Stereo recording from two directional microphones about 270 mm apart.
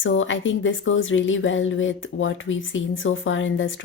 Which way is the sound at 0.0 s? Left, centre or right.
Left.